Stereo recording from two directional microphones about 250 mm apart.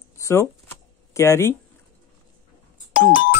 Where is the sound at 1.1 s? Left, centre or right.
Centre.